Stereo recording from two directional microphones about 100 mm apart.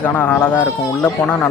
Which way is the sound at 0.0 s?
15° left (ahead or behind).